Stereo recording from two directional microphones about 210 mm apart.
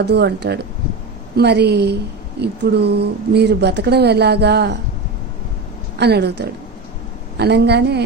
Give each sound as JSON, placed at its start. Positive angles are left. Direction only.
{"t": 0.0, "sound": "speech", "side_deg": -55}
{"t": 6.0, "sound": "speech", "side_deg": -50}